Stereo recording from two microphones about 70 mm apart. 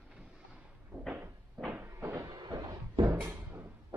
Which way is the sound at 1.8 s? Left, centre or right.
Right.